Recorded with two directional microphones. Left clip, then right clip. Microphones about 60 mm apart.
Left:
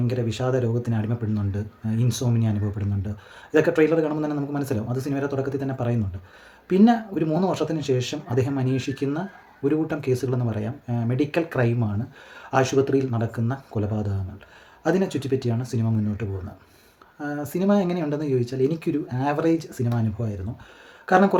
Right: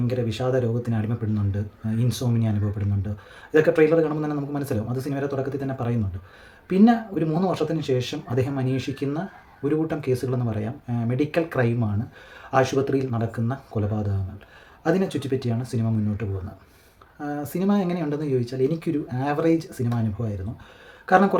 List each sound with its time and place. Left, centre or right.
0.1 s speech: left